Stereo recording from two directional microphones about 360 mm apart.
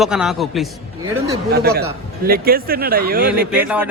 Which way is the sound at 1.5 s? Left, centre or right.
Right.